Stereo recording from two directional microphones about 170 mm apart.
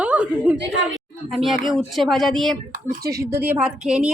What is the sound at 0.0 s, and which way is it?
Chuckle, 5° right (ahead or behind).